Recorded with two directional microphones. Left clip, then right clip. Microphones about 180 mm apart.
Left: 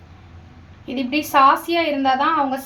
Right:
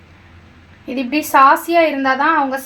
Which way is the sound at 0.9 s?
35° right (ahead or behind).